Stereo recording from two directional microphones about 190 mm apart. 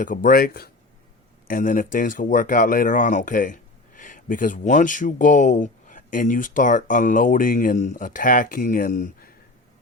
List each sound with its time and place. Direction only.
0.0 s speech: 45° left (ahead or behind)